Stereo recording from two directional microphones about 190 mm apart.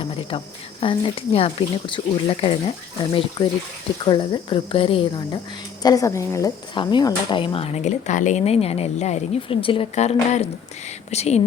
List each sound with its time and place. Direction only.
0.0 s speech: 30° left (ahead or behind)